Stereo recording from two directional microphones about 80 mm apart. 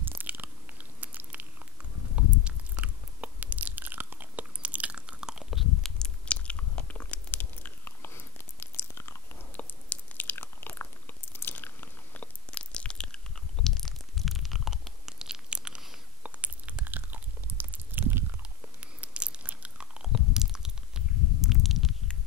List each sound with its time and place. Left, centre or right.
0.0 s biting: right; by 9.4 s left
9.5 s biting: left; by 18.2 s right
18.4 s chewing: centre